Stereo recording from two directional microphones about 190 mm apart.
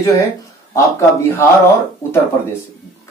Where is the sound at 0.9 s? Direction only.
15° left (ahead or behind).